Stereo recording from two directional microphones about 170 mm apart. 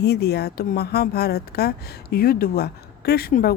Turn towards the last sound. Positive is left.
turn(degrees=65)  # may be behind; listen again after turning